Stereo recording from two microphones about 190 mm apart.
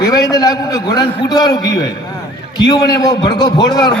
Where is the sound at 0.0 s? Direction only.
20° left (ahead or behind).